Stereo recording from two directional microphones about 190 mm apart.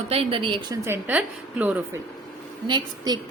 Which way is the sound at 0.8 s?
10° right (ahead or behind).